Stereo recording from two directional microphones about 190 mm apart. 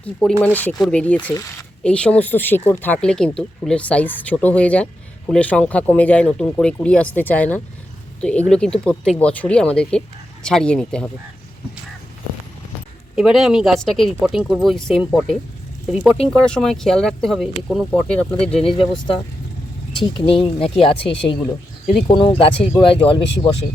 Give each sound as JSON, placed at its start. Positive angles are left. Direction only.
{"t": 0.0, "sound": "speech", "side_deg": 5}
{"t": 13.1, "sound": "speech", "side_deg": -5}
{"t": 20.1, "sound": "speech", "side_deg": 30}